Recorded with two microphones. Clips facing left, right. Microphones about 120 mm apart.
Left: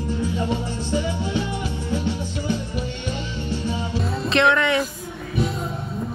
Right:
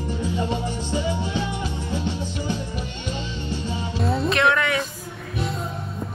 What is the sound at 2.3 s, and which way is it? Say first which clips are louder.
Music: left 2 dB; 15° right (ahead or behind).